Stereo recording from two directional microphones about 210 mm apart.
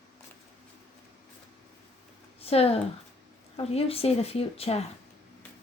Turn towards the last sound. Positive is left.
turn(degrees=30)  # may be behind; listen again after turning